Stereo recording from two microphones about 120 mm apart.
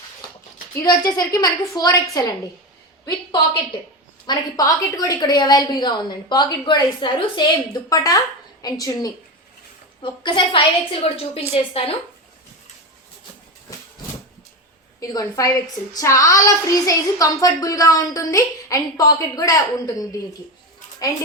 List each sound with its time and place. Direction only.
0.8 s a woman's voice: 35° left (ahead or behind)
4.3 s a woman's voice: 30° left (ahead or behind)
10.0 s a woman's voice: 45° left (ahead or behind)
11.0 s a woman's voice: 55° left (ahead or behind)
15.0 s a woman's voice: 30° left (ahead or behind)